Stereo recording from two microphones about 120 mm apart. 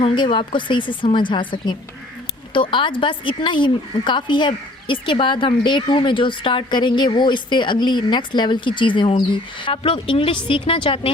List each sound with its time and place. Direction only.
0.0 s speech: 45° left (ahead or behind)